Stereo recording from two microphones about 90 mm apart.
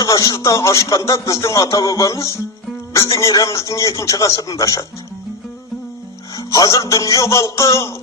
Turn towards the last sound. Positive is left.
turn(degrees=35)  # may be behind; listen again after turning